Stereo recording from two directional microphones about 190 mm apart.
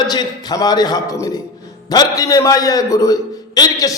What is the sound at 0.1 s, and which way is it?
A man's voice, 20° left (ahead or behind).